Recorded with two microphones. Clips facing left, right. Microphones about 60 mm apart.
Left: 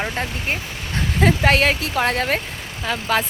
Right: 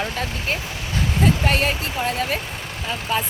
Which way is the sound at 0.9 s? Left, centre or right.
Left.